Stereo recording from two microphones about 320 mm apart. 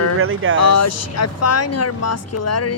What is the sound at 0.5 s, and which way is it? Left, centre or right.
Speech, left.